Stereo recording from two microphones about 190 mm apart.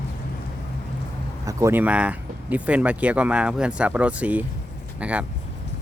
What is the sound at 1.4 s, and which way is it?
Speech, 15° right (ahead or behind).